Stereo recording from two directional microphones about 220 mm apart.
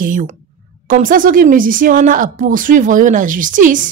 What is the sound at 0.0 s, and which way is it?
A woman's voice, 40° right (ahead or behind).